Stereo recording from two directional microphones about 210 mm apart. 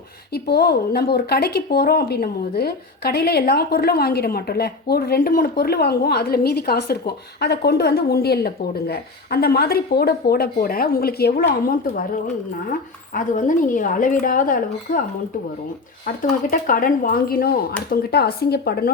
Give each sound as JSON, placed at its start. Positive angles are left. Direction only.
{"t": 0.3, "sound": "speech", "side_deg": 50}
{"t": 13.1, "sound": "speech", "side_deg": 40}
{"t": 16.0, "sound": "speech", "side_deg": 40}